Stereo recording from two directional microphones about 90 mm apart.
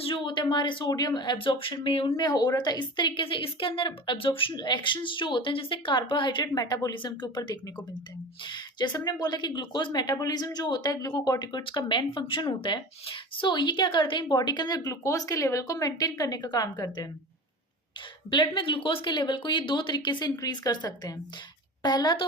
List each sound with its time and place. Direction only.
0.0 s a woman's voice: 70° left (ahead or behind)
0.9 s a woman's voice: 45° left (ahead or behind); by 2.2 s 85° left
2.2 s a woman's voice: 50° left (ahead or behind)
6.9 s a woman's voice: 60° left (ahead or behind)
11.6 s a woman's voice: 60° left (ahead or behind)
18.3 s a woman's voice: 65° left (ahead or behind)